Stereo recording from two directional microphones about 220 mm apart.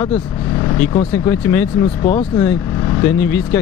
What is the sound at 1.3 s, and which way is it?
Speech, 10° left (ahead or behind).